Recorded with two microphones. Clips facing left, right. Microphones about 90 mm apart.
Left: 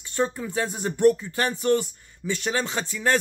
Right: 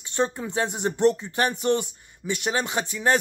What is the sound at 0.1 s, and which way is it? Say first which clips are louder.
Speech: even; 20° right (ahead or behind).